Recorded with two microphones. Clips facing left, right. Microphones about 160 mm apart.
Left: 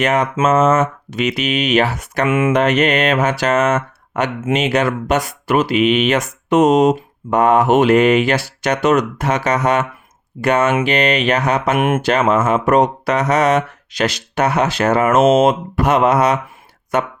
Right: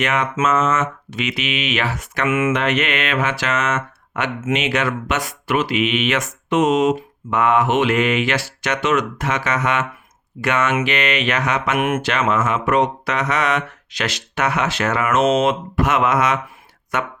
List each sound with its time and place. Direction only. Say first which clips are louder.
0.0 s speech: left 4 dB; 35° left (ahead or behind)
11.9 s a sound: left 4 dB; 50° left (ahead or behind)
12.5 s speech: left 4 dB; 40° left (ahead or behind)